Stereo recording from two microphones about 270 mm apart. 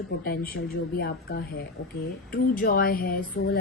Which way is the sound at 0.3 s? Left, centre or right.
Left.